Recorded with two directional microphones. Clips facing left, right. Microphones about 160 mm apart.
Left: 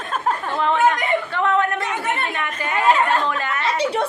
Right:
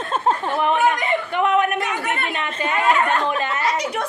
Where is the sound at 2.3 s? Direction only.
20° right (ahead or behind).